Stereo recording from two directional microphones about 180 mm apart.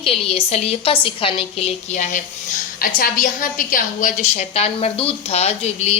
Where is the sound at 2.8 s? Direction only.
50° left (ahead or behind).